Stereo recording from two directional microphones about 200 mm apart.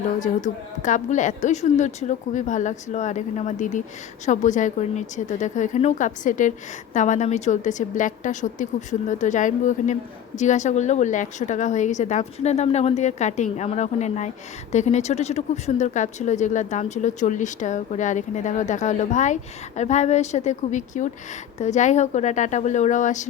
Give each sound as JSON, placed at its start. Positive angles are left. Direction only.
{"t": 0.2, "sound": "a woman's voice", "side_deg": 40}